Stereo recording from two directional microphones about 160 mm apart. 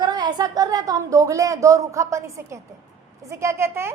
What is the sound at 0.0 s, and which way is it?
A woman's voice, 25° right (ahead or behind).